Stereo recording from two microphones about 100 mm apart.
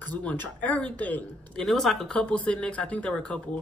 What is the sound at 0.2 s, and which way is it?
Speech, 15° left (ahead or behind).